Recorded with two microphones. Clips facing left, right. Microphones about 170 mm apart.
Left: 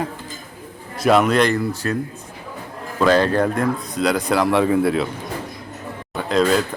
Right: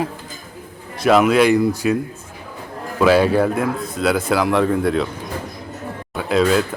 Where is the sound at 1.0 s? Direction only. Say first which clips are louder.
Right 2 dB; centre (ahead or behind).